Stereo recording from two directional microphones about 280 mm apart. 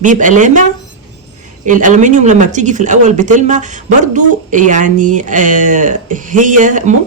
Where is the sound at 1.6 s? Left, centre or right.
Right.